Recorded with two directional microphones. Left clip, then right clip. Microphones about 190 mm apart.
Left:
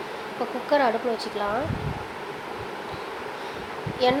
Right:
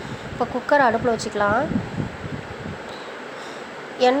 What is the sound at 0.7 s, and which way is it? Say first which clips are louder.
Speech: right 5 dB; 30° right (ahead or behind).